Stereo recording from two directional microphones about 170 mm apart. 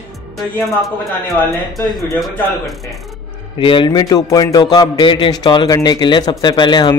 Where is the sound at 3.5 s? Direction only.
30° left (ahead or behind).